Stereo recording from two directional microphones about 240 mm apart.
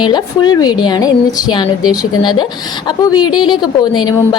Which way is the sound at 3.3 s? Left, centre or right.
Centre.